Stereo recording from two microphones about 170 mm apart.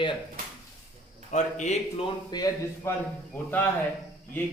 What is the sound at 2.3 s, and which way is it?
Speech, 25° left (ahead or behind).